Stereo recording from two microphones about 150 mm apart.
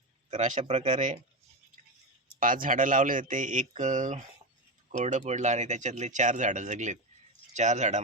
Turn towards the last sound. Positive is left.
turn(degrees=-50)  # may be behind; listen again after turning